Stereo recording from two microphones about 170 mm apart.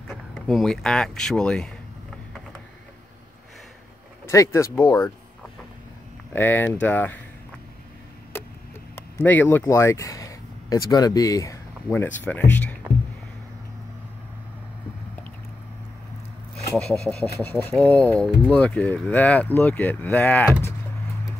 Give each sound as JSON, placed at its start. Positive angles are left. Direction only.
{"t": 0.1, "sound": "speech", "side_deg": 0}
{"t": 4.3, "sound": "speech", "side_deg": 15}
{"t": 6.3, "sound": "speech", "side_deg": 10}
{"t": 8.3, "sound": "a sound", "side_deg": 15}
{"t": 9.2, "sound": "speech", "side_deg": 10}
{"t": 16.7, "sound": "speech", "side_deg": 5}